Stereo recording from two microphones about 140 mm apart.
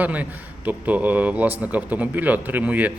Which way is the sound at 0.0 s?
10° right (ahead or behind).